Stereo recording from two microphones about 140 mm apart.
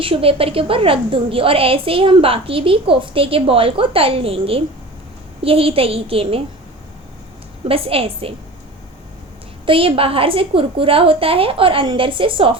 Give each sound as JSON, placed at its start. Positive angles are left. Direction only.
{"t": 0.0, "sound": "a woman's voice", "side_deg": -40}
{"t": 7.7, "sound": "a woman's voice", "side_deg": -40}
{"t": 9.6, "sound": "a woman's voice", "side_deg": -40}